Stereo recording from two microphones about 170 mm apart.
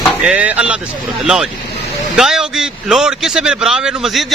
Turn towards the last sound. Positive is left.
turn(degrees=0)  # may be behind; listen again after turning